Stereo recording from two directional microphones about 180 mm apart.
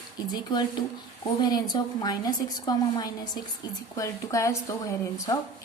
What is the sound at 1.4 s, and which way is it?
A woman's voice, 20° left (ahead or behind).